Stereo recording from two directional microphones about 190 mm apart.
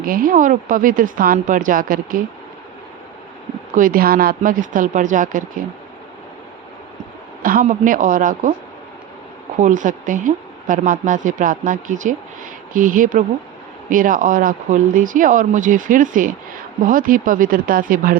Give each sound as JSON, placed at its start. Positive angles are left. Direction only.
{"t": 0.0, "sound": "a woman's voice", "side_deg": -50}
{"t": 3.8, "sound": "a woman's voice", "side_deg": -45}
{"t": 7.4, "sound": "a woman's voice", "side_deg": -45}
{"t": 9.6, "sound": "a woman's voice", "side_deg": -40}